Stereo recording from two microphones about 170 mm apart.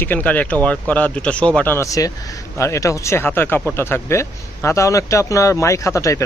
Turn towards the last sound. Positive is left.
turn(degrees=15)  # may be behind; listen again after turning